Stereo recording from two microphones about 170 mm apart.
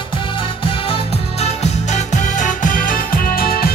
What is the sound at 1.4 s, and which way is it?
Music, 45° left (ahead or behind).